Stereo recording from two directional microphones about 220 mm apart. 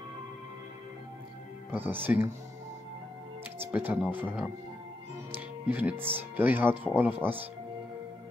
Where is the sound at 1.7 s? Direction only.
10° right (ahead or behind).